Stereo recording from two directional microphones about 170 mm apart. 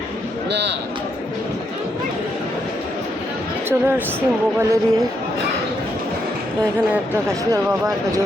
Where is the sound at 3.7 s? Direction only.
10° right (ahead or behind).